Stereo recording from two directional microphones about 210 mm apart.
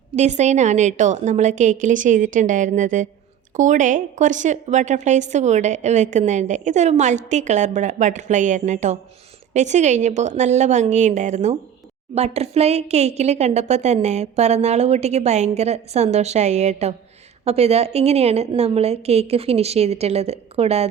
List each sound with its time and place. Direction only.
0.2 s a woman's voice: 35° right (ahead or behind)